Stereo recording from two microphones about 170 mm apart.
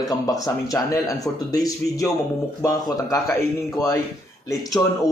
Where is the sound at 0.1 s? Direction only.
20° left (ahead or behind).